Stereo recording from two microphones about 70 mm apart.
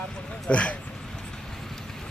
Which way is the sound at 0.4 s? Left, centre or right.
Centre.